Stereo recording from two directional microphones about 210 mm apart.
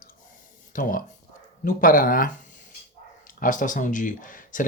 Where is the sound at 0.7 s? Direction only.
40° left (ahead or behind).